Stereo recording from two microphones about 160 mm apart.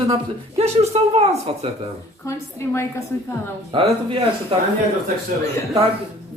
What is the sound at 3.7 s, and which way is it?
Speech, 35° right (ahead or behind).